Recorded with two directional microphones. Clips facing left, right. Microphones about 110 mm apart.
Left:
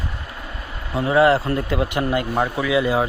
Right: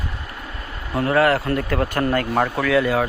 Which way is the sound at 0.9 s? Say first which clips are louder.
Left 2 dB; 15° left (ahead or behind).